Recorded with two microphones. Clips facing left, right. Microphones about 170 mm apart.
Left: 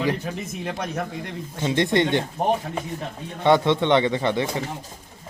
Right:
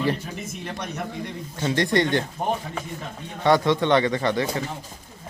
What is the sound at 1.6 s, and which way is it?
Speech, 20° left (ahead or behind).